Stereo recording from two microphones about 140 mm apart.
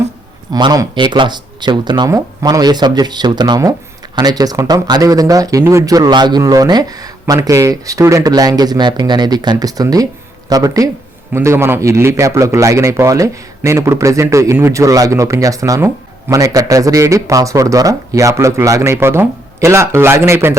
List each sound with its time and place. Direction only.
0.5 s speech: 25° right (ahead or behind)